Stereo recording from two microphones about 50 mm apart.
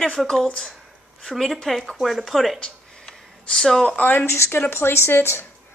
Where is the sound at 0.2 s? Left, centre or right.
Centre.